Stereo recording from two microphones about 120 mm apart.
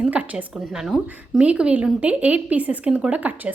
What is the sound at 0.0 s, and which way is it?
Speech, 10° right (ahead or behind).